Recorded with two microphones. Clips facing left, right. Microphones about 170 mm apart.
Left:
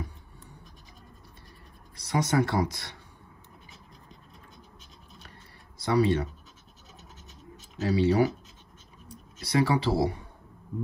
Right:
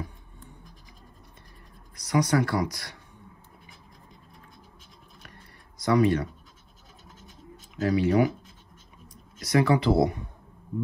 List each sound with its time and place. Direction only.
2.0 s speech: 25° left (ahead or behind)
5.8 s speech: 30° left (ahead or behind)
7.8 s speech: 30° left (ahead or behind)